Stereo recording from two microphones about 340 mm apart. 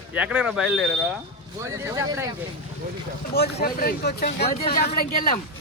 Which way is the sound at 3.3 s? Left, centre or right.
Left.